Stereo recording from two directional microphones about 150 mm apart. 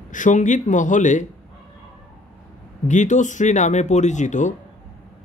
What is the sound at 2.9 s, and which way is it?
Speech, 55° left (ahead or behind).